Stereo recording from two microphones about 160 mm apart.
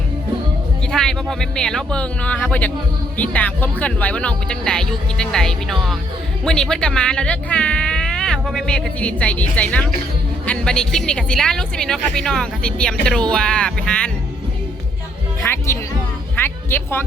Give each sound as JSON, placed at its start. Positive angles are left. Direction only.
{"t": 0.9, "sound": "speech", "side_deg": 5}
{"t": 15.4, "sound": "music", "side_deg": 15}